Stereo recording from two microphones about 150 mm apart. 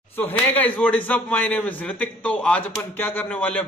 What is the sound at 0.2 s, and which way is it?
A man's voice, 10° left (ahead or behind).